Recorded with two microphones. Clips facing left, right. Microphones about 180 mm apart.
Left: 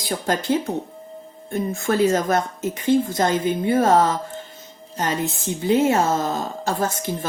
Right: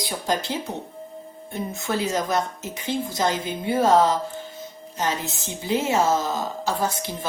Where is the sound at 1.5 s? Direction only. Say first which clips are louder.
Left 5 dB; 50° left (ahead or behind).